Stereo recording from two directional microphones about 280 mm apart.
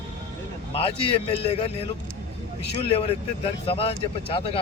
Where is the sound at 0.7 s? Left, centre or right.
Centre.